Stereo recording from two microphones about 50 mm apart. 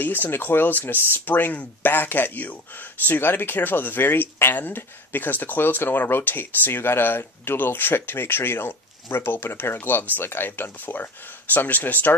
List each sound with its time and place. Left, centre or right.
0.0 s speech: left